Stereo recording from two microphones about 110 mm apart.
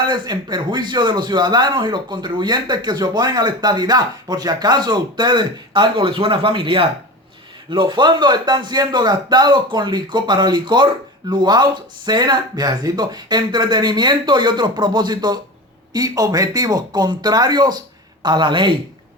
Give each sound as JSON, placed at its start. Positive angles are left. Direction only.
{"t": 0.0, "sound": "a man's voice", "side_deg": -40}